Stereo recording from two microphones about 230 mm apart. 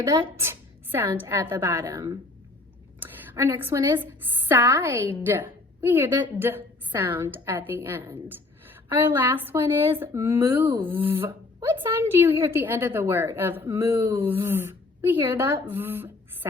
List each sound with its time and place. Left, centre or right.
0.3 s a woman's voice: centre